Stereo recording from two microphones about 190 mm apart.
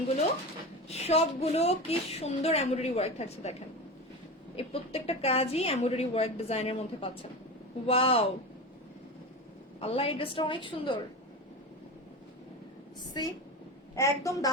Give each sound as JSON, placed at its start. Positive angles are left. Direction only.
{"t": 0.9, "sound": "a woman's voice", "side_deg": 35}
{"t": 4.5, "sound": "a woman's voice", "side_deg": 30}
{"t": 9.8, "sound": "a woman's voice", "side_deg": 30}
{"t": 13.2, "sound": "a woman's voice", "side_deg": 20}